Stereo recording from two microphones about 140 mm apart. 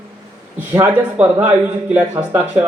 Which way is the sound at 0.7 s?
15° right (ahead or behind).